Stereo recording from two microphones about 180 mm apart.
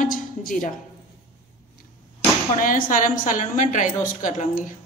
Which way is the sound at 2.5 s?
50° left (ahead or behind).